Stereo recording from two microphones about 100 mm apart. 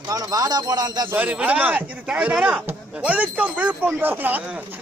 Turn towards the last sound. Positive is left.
turn(degrees=-20)  # may be behind; listen again after turning